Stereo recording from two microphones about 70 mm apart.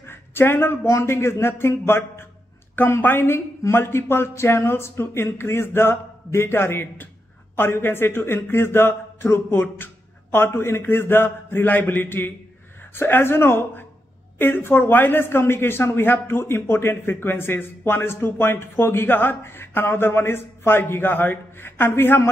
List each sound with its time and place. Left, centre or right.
0.0 s a man's voice: left